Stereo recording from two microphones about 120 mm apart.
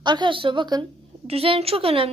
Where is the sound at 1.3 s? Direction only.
55° right (ahead or behind).